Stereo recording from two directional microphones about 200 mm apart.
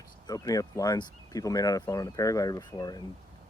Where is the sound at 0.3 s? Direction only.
20° left (ahead or behind).